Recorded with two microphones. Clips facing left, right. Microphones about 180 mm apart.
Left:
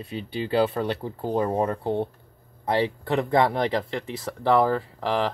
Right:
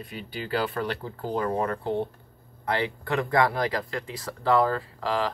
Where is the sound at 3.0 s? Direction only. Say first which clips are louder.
Left 1 dB; 25° left (ahead or behind).